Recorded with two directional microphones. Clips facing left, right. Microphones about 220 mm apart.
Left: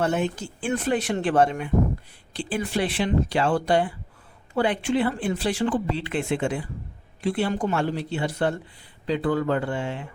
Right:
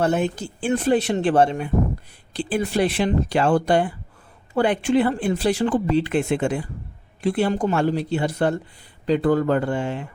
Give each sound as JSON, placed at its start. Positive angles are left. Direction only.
{"t": 0.0, "sound": "speech", "side_deg": -35}